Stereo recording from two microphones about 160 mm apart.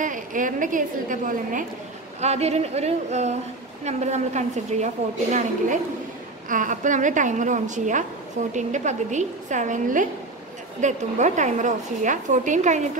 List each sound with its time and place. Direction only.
0.0 s a woman's voice: 55° right (ahead or behind)
2.1 s a woman's voice: 40° right (ahead or behind)